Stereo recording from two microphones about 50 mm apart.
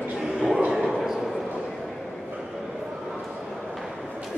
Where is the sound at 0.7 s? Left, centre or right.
Centre.